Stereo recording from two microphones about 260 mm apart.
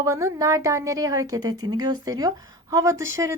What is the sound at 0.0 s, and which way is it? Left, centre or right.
A woman's voice, centre.